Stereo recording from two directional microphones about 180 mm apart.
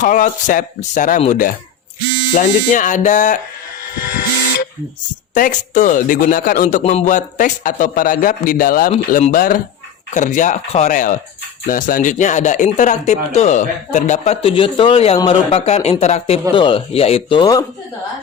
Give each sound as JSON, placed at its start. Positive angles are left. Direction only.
{"t": 0.0, "sound": "a man's voice", "side_deg": 45}
{"t": 4.0, "sound": "steam whistle", "side_deg": 55}
{"t": 5.3, "sound": "a man's voice", "side_deg": 45}